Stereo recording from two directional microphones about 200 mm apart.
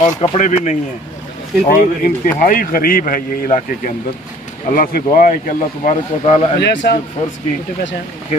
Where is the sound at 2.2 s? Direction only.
45° left (ahead or behind).